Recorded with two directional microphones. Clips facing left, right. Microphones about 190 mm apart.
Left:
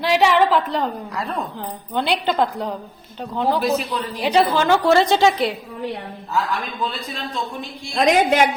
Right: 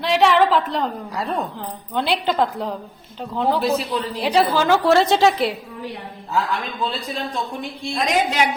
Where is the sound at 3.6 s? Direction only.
30° right (ahead or behind).